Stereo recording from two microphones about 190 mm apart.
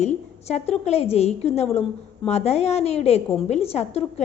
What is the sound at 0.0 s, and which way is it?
A woman's voice, 35° left (ahead or behind).